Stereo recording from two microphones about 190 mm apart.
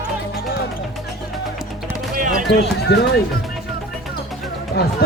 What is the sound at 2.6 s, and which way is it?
Speech, 65° left (ahead or behind).